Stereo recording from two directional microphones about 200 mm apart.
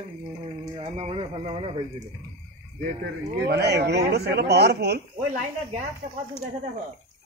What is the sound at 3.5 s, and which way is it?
Speech, 55° right (ahead or behind).